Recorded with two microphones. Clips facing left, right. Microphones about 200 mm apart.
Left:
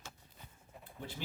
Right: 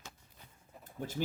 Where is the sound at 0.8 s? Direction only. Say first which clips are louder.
Right 6 dB; 45° right (ahead or behind).